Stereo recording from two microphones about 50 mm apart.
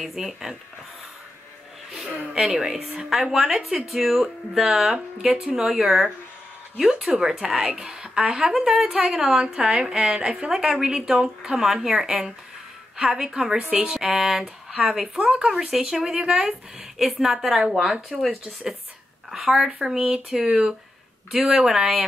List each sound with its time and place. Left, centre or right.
0.0 s speech: centre
2.4 s a woman's voice: centre
19.3 s a woman's voice: centre
21.4 s a woman's voice: right